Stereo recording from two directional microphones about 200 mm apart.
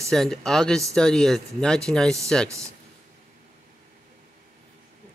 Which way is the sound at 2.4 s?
15° right (ahead or behind).